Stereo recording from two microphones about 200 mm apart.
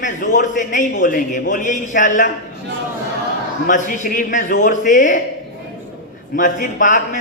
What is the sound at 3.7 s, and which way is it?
A man's voice, 40° left (ahead or behind).